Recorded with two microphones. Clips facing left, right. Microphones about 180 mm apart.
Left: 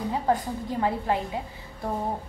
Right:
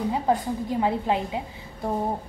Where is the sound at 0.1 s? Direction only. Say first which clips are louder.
Right 2 dB; 15° right (ahead or behind).